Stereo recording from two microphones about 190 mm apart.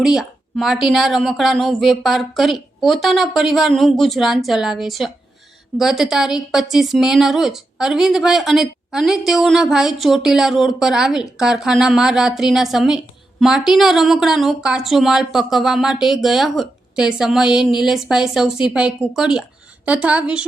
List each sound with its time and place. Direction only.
0.0 s speech: centre (ahead or behind)